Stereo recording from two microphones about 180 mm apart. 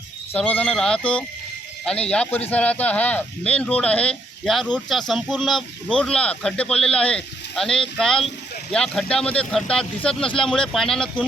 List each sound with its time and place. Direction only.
0.3 s speech: 10° left (ahead or behind)